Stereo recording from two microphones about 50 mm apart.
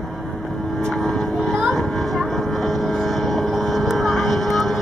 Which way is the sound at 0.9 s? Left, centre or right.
Centre.